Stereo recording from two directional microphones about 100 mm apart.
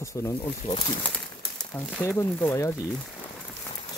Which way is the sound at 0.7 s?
65° left (ahead or behind).